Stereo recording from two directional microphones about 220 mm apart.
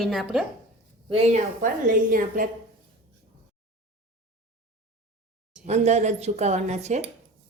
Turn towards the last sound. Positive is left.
turn(degrees=-30)  # may be behind; listen again after turning